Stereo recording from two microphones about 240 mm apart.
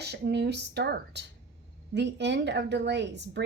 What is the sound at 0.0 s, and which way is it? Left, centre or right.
A woman's voice, right.